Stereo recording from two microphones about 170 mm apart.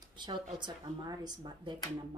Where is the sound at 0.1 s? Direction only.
25° right (ahead or behind).